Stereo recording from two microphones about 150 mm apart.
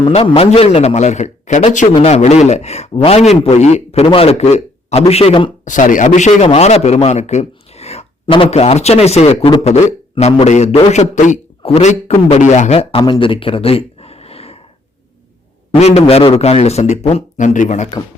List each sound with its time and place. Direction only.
0.1 s a man's voice: 40° left (ahead or behind)
5.6 s a man's voice: 60° left (ahead or behind); by 13.0 s 45° left (ahead or behind)
13.0 s a sound: 35° left (ahead or behind)
15.7 s a man's voice: 45° left (ahead or behind)
17.3 s speech: 55° left (ahead or behind)